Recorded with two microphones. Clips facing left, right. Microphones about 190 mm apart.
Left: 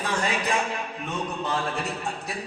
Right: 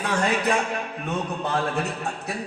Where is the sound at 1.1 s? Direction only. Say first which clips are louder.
Right 2 dB; 60° right (ahead or behind).